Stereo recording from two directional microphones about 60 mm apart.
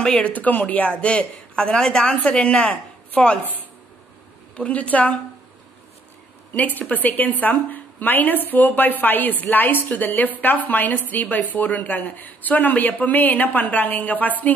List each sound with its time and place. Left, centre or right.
0.0 s speech: centre
6.5 s speech: left